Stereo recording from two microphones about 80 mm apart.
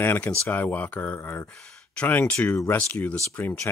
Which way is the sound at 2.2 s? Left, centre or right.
Centre.